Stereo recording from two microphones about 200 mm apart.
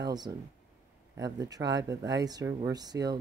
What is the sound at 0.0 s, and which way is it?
Speech, 20° right (ahead or behind).